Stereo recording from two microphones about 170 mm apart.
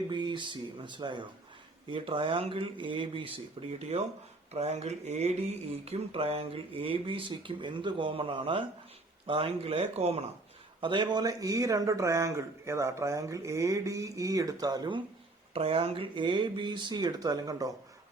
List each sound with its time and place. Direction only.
0.1 s speech: 25° right (ahead or behind)
10.8 s speech: 30° right (ahead or behind)